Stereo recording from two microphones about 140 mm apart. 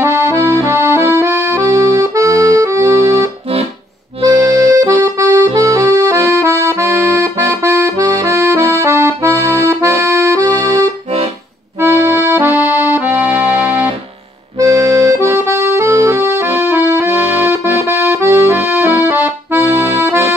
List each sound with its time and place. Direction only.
0.2 s accordion: 20° right (ahead or behind)
4.3 s accordion: 25° right (ahead or behind)
12.3 s music: 15° right (ahead or behind)
14.6 s accordion: 20° right (ahead or behind)